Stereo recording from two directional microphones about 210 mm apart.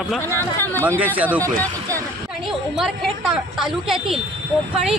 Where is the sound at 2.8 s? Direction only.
Centre (ahead or behind).